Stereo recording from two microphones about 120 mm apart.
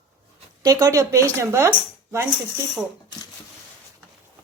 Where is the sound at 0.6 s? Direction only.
30° right (ahead or behind).